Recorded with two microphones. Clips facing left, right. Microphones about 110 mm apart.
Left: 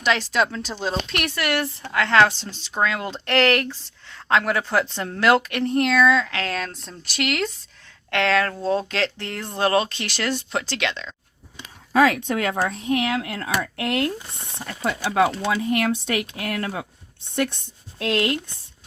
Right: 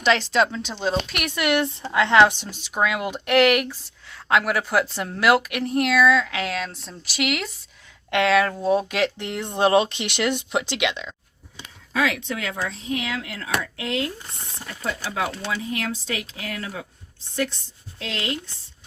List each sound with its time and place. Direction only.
0.0 s speech: 10° left (ahead or behind)
1.4 s speech: 20° right (ahead or behind)
11.9 s speech: 40° left (ahead or behind)
13.7 s a woman's voice: 60° left (ahead or behind)